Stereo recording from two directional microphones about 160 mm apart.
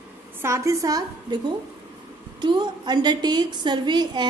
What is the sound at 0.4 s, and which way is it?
A woman's voice, 20° right (ahead or behind).